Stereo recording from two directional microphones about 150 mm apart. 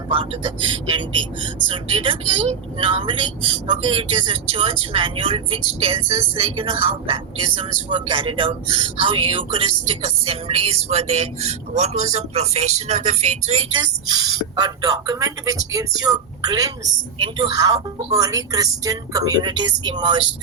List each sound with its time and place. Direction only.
0.9 s speech: 35° right (ahead or behind)
13.8 s speech: 30° right (ahead or behind)